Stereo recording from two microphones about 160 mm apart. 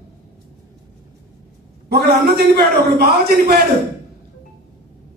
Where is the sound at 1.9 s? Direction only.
80° right.